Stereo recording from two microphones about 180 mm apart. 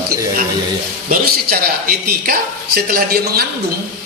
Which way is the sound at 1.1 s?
55° right (ahead or behind).